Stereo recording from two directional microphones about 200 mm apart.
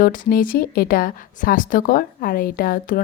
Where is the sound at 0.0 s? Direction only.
45° left (ahead or behind).